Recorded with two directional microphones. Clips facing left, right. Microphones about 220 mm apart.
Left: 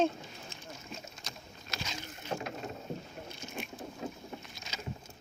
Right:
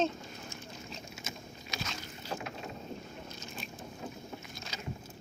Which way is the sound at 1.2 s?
Centre (ahead or behind).